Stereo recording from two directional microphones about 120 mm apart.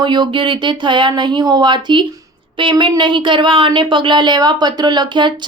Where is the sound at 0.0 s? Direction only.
40° right (ahead or behind).